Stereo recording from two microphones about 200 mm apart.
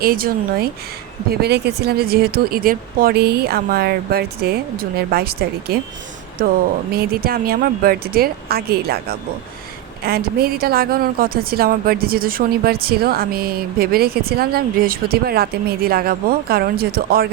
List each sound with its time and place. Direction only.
0.0 s a woman's voice: 45° right (ahead or behind)
6.9 s a woman's voice: 50° right (ahead or behind)